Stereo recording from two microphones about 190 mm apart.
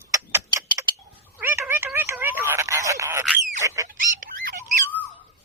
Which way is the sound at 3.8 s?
45° right (ahead or behind).